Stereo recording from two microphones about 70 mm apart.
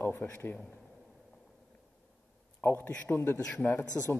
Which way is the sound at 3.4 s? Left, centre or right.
Centre.